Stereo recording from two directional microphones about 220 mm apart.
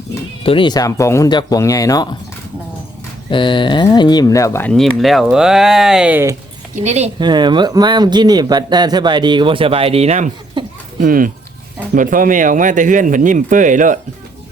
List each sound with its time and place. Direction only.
0.4 s speech: 25° left (ahead or behind)
3.2 s speech: 20° left (ahead or behind); by 6.3 s 10° right (ahead or behind)
6.7 s speech: 30° right (ahead or behind)
7.2 s speech: 20° right (ahead or behind); by 14.0 s 35° right (ahead or behind)